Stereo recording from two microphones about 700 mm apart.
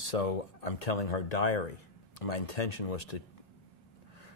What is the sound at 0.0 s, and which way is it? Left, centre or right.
Speech, left.